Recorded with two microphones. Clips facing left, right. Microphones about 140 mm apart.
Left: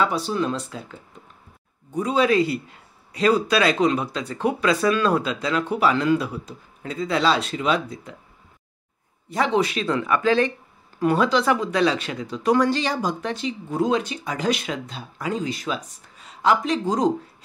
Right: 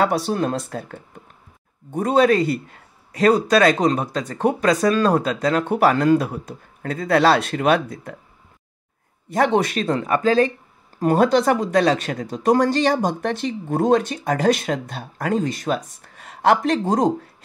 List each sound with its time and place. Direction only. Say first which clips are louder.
0.0 s speech: right 3 dB; 55° right (ahead or behind)
9.3 s speech: right 3 dB; 55° right (ahead or behind)